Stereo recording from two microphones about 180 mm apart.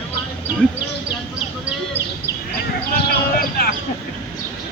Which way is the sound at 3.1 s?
55° left (ahead or behind).